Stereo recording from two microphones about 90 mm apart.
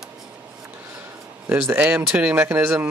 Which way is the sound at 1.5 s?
20° right (ahead or behind).